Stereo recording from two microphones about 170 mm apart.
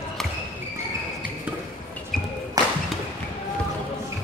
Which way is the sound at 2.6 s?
20° right (ahead or behind).